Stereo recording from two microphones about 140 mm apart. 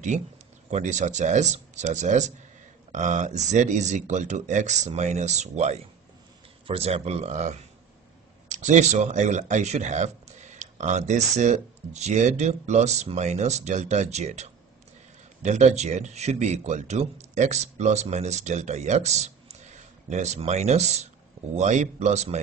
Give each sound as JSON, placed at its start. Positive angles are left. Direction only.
{"t": 0.7, "sound": "speech", "side_deg": -55}